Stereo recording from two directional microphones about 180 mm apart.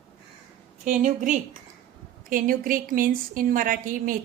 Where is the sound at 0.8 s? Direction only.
45° right (ahead or behind).